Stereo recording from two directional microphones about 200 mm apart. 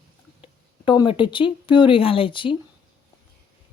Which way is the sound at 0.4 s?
25° left (ahead or behind).